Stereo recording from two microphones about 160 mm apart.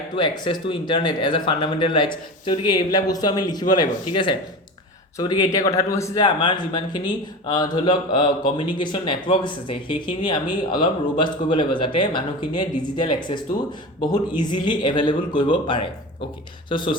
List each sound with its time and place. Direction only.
0.2 s speech: 30° left (ahead or behind)
6.2 s speech: 30° left (ahead or behind)